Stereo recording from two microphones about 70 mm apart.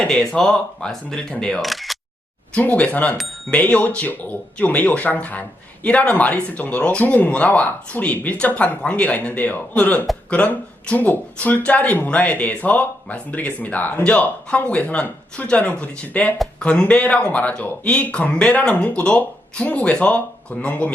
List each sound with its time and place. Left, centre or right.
0.1 s speech: centre
1.6 s single-lens reflex camera: centre
2.6 s speech: centre